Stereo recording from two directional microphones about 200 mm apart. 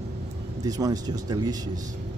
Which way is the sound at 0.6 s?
20° right (ahead or behind).